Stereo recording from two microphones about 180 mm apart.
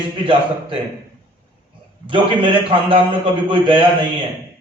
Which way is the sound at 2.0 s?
30° right (ahead or behind).